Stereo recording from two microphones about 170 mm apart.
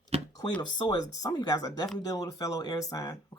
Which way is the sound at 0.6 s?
25° left (ahead or behind).